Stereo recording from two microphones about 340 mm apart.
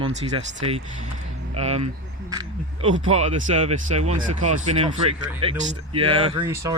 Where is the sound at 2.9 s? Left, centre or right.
Centre.